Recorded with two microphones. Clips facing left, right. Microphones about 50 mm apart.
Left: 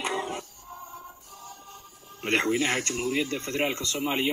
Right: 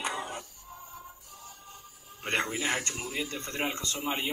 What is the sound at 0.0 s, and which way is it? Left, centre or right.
Music, left.